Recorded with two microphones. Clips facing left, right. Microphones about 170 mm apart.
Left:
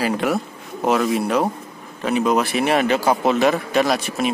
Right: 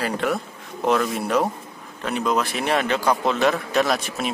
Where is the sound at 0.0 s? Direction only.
5° left (ahead or behind).